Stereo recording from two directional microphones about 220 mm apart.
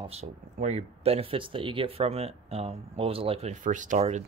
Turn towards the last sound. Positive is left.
turn(degrees=-30)  # may be behind; listen again after turning